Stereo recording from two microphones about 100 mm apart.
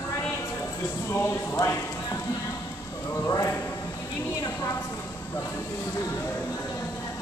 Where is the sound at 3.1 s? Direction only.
30° left (ahead or behind).